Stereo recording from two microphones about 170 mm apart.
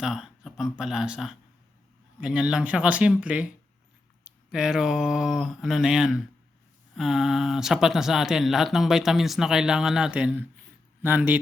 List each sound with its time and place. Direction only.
0.0 s speech: 5° right (ahead or behind)
4.5 s speech: 5° right (ahead or behind)